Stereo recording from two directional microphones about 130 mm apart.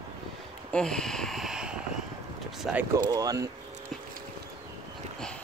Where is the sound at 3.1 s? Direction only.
30° right (ahead or behind).